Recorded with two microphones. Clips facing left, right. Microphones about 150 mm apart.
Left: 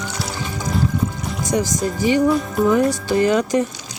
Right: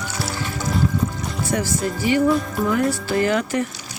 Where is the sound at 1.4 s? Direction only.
15° left (ahead or behind).